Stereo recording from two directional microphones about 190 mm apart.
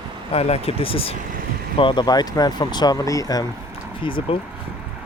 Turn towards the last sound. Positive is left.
turn(degrees=25)  # may be behind; listen again after turning